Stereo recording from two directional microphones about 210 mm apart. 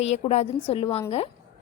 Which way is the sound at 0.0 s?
30° left (ahead or behind).